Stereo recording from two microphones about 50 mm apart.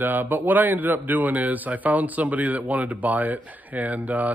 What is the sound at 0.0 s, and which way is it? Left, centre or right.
A man's voice, right.